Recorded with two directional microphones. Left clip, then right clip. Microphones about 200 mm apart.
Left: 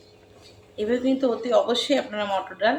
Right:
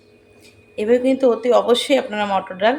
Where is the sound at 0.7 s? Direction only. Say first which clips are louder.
Right 7 dB; 30° right (ahead or behind).